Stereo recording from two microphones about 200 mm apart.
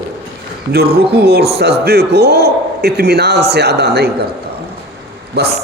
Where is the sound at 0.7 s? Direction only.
50° right (ahead or behind).